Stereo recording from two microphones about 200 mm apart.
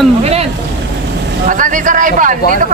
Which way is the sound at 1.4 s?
40° right (ahead or behind).